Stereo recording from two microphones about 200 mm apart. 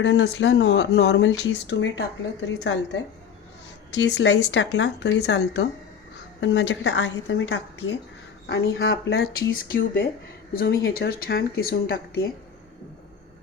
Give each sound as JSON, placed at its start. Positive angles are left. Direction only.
{"t": 0.0, "sound": "speech", "side_deg": 65}
{"t": 3.9, "sound": "a woman's voice", "side_deg": 60}
{"t": 8.4, "sound": "speech", "side_deg": 55}